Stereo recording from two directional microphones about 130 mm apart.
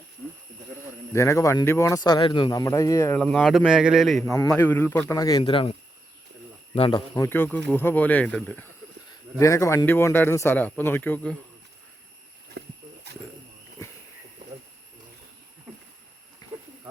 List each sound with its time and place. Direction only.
1.1 s speech: 20° left (ahead or behind)
3.2 s speech: 5° left (ahead or behind)
3.6 s a man's voice: 5° right (ahead or behind)
4.3 s speech: 20° left (ahead or behind)
5.1 s speech: 30° left (ahead or behind)
5.4 s speech: 40° left (ahead or behind)
7.3 s speech: 15° left (ahead or behind)
9.4 s speech: 25° left (ahead or behind)